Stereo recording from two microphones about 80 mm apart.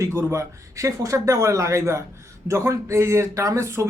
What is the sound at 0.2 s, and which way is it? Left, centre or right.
Speech, right.